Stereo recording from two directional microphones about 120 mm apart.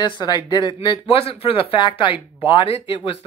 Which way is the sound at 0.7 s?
55° left (ahead or behind).